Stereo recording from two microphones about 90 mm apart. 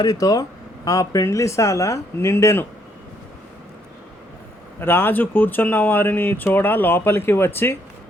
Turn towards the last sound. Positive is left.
turn(degrees=25)  # may be behind; listen again after turning